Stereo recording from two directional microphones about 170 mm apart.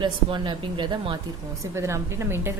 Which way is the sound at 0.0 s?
25° right (ahead or behind).